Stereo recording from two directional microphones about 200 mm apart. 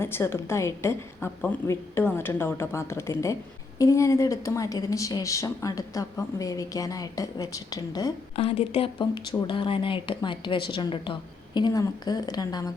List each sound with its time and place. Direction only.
0.0 s a woman's voice: 10° left (ahead or behind)